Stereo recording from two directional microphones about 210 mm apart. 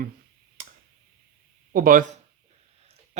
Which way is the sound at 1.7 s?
40° right (ahead or behind).